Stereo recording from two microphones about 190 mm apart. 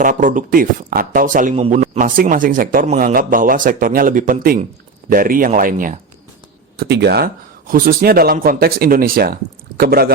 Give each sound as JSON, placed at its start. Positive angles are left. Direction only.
{"t": 0.0, "sound": "speech", "side_deg": -45}
{"t": 6.7, "sound": "speech", "side_deg": -60}
{"t": 7.7, "sound": "speech", "side_deg": -50}